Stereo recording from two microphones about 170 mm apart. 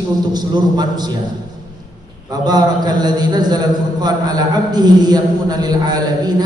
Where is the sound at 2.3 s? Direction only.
25° right (ahead or behind).